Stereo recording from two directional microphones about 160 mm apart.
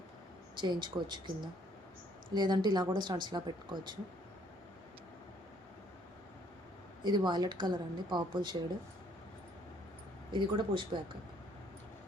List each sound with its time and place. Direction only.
0.5 s speech: 30° right (ahead or behind)
2.3 s speech: 25° right (ahead or behind)
7.0 s speech: 25° right (ahead or behind)
10.3 s speech: 30° right (ahead or behind)